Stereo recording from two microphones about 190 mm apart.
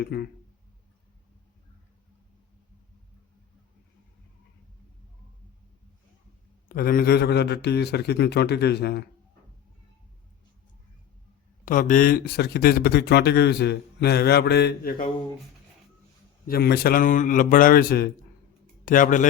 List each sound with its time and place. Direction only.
0.0 s speech: 55° left (ahead or behind)
6.7 s speech: 50° left (ahead or behind)
11.6 s speech: 45° left (ahead or behind)
16.5 s a man's voice: 55° left (ahead or behind)